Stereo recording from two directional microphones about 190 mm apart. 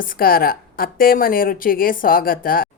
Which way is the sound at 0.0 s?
50° left (ahead or behind).